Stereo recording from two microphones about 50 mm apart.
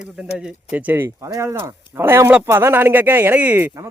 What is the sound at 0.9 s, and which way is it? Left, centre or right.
Speech, right.